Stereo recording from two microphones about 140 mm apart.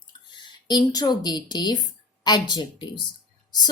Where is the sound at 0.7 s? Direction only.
30° left (ahead or behind).